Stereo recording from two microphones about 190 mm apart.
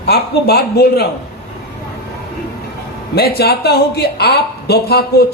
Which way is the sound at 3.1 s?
55° left (ahead or behind).